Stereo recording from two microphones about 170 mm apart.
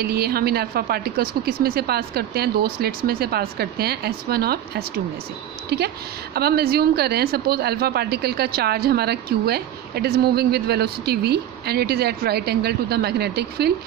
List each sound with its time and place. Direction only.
0.0 s speech: 65° right (ahead or behind)